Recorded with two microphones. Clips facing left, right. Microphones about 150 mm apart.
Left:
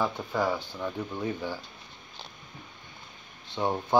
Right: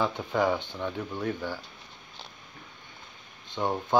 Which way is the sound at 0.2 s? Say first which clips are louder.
Right 2 dB; centre (ahead or behind).